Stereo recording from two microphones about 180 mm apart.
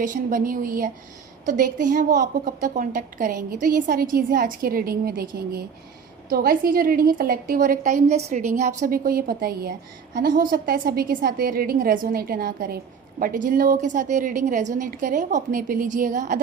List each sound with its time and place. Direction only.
0.0 s a woman's voice: 45° right (ahead or behind)